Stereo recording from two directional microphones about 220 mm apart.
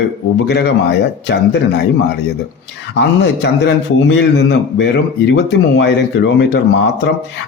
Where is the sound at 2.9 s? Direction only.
50° left (ahead or behind).